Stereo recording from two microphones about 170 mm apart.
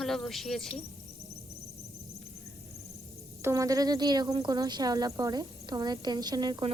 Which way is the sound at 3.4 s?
20° right (ahead or behind).